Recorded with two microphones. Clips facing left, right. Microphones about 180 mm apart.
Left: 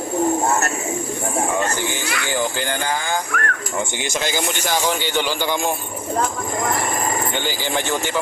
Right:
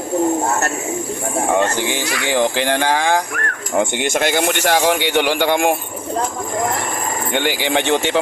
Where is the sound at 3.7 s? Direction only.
60° right (ahead or behind).